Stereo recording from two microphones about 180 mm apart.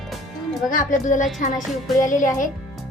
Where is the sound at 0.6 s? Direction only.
45° left (ahead or behind).